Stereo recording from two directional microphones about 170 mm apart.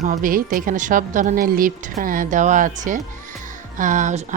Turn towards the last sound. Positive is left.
turn(degrees=-45)  # may be behind; listen again after turning